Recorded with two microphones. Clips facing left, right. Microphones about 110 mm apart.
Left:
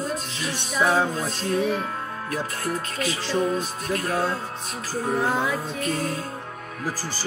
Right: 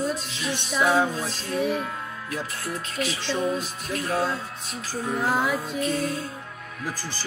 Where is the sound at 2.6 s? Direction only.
45° left (ahead or behind).